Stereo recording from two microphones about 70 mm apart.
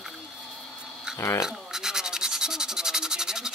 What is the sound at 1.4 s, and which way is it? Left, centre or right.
Scratch, centre.